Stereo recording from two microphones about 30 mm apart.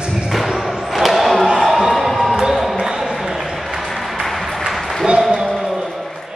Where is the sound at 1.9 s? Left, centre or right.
Centre.